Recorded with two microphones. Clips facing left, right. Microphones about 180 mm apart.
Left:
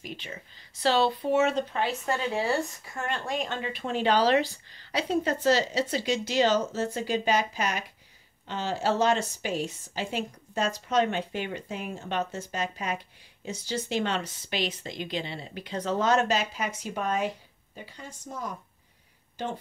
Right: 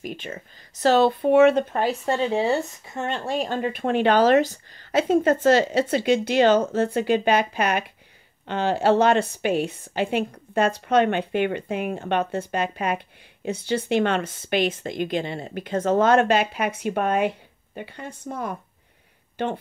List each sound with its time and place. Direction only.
0.0 s speech: 50° right (ahead or behind)
1.9 s a woman's voice: 30° right (ahead or behind); by 19.6 s 60° right (ahead or behind)